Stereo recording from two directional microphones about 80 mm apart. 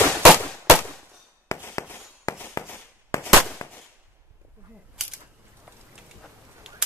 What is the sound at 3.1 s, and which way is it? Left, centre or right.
Firecracker, left.